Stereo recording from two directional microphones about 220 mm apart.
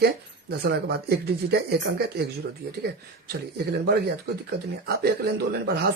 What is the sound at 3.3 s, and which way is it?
Speech, 45° right (ahead or behind).